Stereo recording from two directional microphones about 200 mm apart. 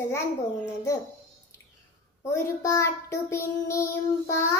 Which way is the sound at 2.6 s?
15° left (ahead or behind).